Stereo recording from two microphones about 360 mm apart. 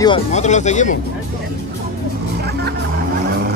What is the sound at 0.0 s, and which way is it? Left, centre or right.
Speech, centre.